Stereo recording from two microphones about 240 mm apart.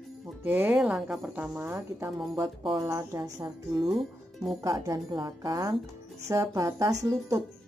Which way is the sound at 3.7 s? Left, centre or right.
Centre.